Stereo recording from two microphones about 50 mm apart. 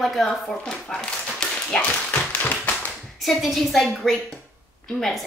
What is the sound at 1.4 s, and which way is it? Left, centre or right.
Tap, centre.